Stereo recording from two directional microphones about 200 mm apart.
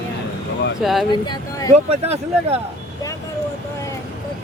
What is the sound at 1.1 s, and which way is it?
Speech, 20° left (ahead or behind).